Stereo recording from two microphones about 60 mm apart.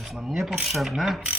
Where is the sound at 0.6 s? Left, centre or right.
Centre.